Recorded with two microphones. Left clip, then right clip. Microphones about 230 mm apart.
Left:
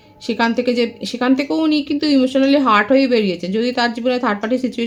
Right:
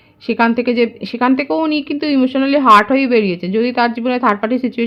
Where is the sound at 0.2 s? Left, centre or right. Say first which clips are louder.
Right 3 dB; right.